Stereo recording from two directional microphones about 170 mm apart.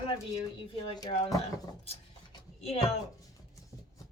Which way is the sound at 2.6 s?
35° left (ahead or behind).